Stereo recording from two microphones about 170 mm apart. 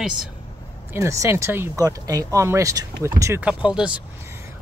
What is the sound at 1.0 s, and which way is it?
Speech, 15° right (ahead or behind).